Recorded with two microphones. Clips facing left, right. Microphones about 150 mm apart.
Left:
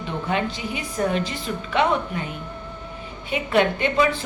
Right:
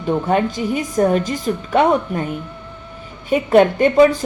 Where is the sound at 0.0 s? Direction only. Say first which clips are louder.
Right 8 dB; 45° right (ahead or behind).